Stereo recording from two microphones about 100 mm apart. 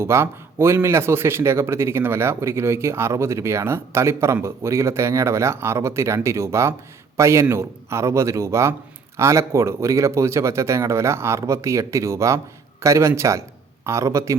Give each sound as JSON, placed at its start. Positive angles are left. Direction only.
{"t": 0.0, "sound": "a man's voice", "side_deg": -25}